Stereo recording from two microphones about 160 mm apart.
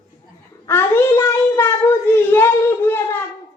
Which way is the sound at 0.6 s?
15° left (ahead or behind).